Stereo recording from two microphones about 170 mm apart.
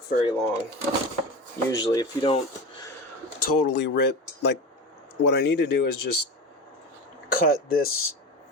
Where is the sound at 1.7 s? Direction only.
25° left (ahead or behind).